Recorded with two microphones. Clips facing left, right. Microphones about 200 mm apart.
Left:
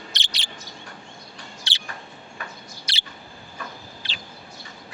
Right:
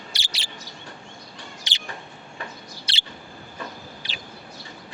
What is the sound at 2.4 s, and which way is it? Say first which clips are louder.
Bird: right 2 dB; 30° right (ahead or behind).